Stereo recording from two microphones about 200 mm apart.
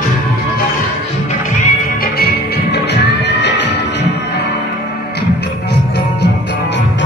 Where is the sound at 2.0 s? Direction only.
55° left (ahead or behind).